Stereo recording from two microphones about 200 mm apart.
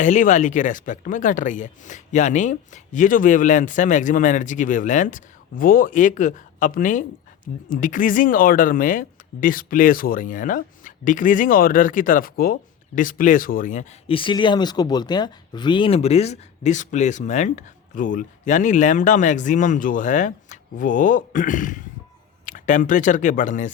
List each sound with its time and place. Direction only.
0.0 s speech: 40° left (ahead or behind)
14.1 s speech: 25° left (ahead or behind)